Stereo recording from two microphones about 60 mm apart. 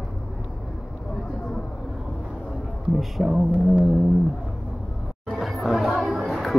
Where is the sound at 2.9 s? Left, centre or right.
Centre.